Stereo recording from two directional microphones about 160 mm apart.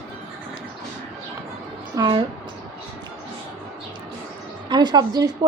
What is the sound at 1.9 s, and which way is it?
Speech, 30° right (ahead or behind).